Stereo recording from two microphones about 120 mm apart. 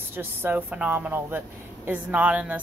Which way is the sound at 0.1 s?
15° right (ahead or behind).